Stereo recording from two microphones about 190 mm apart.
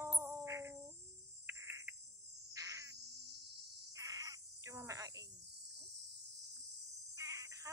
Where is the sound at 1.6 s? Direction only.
15° right (ahead or behind).